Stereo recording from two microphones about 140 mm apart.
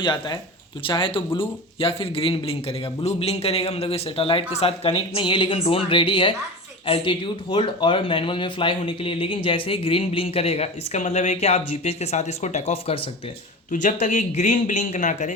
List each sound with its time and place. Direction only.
0.0 s speech: 35° left (ahead or behind)
13.7 s speech: 65° left (ahead or behind)